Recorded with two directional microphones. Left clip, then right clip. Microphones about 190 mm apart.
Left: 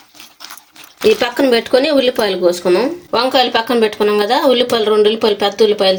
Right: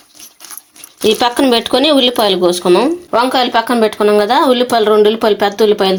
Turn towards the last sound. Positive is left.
turn(degrees=-30)  # may be behind; listen again after turning